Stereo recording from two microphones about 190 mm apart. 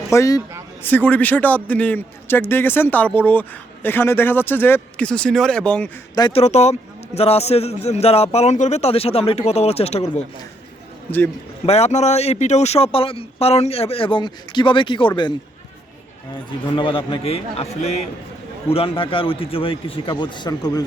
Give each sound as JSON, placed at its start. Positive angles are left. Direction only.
{"t": 0.1, "sound": "a man's voice", "side_deg": 15}
{"t": 6.1, "sound": "a man's voice", "side_deg": 20}
{"t": 6.4, "sound": "speech", "side_deg": 35}
{"t": 11.6, "sound": "speech", "side_deg": 35}
{"t": 16.5, "sound": "a man's voice", "side_deg": 25}